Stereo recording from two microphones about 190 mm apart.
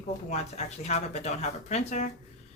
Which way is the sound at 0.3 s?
35° left (ahead or behind).